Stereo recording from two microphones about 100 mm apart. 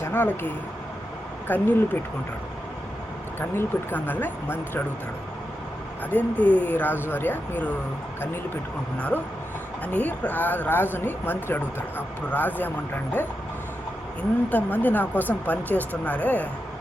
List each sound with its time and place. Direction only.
0.0 s speech: 20° left (ahead or behind)
3.5 s speech: 20° left (ahead or behind)
6.1 s speech: 15° left (ahead or behind)
9.0 s speech: 15° left (ahead or behind)